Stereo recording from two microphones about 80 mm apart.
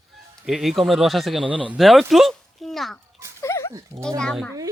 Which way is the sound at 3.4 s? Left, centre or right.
Left.